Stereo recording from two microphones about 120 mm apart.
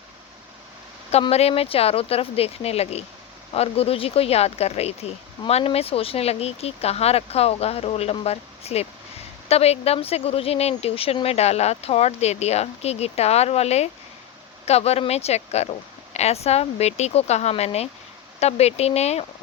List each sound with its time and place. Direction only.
1.3 s speech: 60° left (ahead or behind)